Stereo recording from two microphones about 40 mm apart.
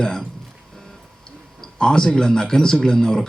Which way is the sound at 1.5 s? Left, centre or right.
Centre.